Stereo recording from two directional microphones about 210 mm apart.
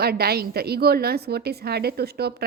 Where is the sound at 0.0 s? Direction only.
50° right (ahead or behind).